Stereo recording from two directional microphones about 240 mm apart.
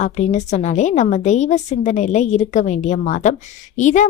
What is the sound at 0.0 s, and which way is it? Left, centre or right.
A woman's voice, left.